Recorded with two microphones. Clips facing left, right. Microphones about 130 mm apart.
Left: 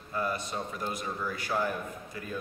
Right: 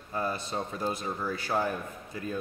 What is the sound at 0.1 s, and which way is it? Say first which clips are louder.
A man's voice: right 1 dB; 30° right (ahead or behind).